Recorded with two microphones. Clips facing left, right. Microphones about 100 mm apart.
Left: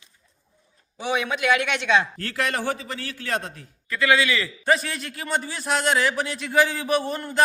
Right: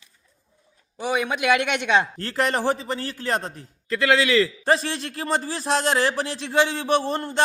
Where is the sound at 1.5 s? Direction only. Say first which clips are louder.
Right 2 dB; 55° right (ahead or behind).